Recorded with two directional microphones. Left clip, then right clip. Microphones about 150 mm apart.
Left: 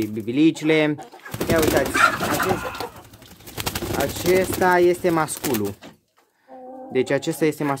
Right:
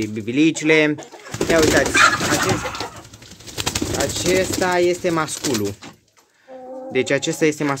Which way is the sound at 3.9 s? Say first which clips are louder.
Even; 30° left (ahead or behind).